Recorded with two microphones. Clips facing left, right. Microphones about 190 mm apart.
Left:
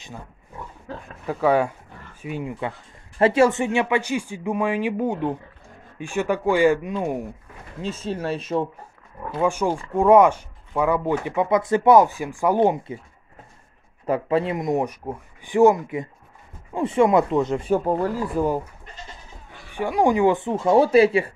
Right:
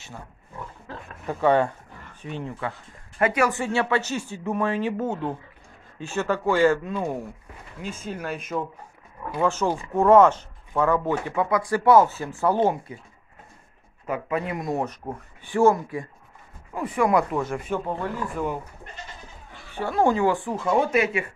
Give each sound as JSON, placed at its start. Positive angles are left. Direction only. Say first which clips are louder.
{"t": 1.2, "sound": "speech", "louder": "left 1 dB", "side_deg": 5}
{"t": 3.2, "sound": "speech", "louder": "left 5 dB", "side_deg": 30}
{"t": 7.8, "sound": "speech", "louder": "left 5 dB", "side_deg": 30}
{"t": 9.4, "sound": "speech", "louder": "left 2 dB", "side_deg": 15}
{"t": 14.0, "sound": "speech", "louder": "left 6 dB", "side_deg": 30}
{"t": 17.6, "sound": "speech", "louder": "left 7 dB", "side_deg": 35}
{"t": 19.7, "sound": "speech", "louder": "left 2 dB", "side_deg": 15}